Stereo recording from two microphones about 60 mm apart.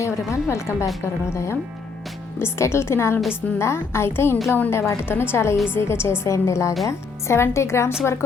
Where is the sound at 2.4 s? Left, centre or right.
Left.